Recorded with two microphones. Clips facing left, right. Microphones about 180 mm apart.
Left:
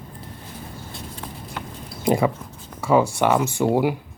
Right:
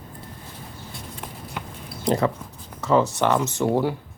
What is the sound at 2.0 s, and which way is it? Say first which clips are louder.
Speech: left 2 dB; 10° left (ahead or behind).